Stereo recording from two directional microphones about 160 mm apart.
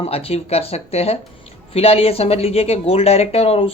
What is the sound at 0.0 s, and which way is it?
Speech, 40° left (ahead or behind).